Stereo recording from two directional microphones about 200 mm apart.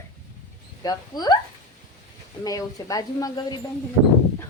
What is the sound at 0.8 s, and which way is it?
Speech, 20° left (ahead or behind).